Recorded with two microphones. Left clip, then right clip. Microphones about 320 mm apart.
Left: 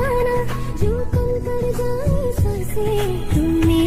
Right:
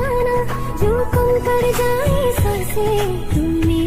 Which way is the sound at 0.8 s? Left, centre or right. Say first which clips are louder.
Right 7 dB; right.